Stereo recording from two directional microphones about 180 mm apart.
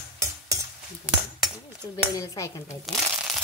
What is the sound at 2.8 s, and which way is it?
Crumpling, centre (ahead or behind).